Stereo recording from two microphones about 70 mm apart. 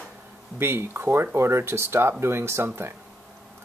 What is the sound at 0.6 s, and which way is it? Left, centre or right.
Speech, right.